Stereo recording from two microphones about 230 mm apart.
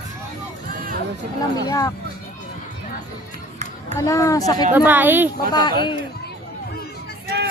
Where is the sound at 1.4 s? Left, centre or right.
Centre.